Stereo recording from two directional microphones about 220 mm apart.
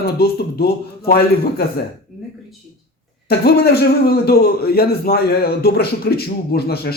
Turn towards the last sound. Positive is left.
turn(degrees=45)  # may be behind; listen again after turning